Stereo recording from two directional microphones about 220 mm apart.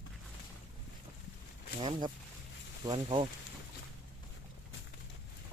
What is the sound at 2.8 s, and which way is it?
Speech, 20° right (ahead or behind).